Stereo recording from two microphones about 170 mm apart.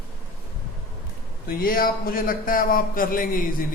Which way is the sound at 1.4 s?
55° left (ahead or behind).